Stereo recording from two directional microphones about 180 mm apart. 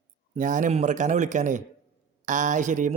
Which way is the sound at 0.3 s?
45° right (ahead or behind).